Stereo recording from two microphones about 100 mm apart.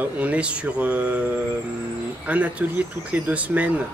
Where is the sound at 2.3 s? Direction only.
15° right (ahead or behind).